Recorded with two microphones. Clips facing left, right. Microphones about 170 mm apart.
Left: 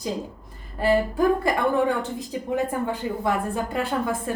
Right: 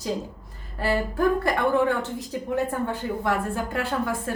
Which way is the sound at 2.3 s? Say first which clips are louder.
Left 1 dB; 15° left (ahead or behind).